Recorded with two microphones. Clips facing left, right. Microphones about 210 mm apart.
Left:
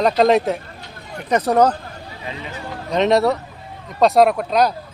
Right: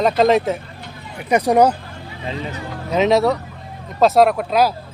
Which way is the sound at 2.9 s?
Centre (ahead or behind).